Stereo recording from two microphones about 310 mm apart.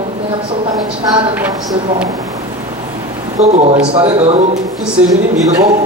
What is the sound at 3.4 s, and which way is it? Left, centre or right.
A man's voice, right.